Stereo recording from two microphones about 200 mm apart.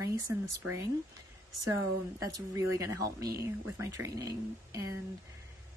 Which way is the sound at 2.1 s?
15° right (ahead or behind).